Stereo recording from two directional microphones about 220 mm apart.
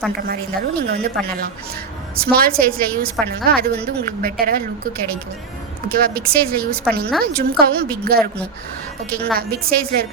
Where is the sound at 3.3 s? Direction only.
45° right (ahead or behind).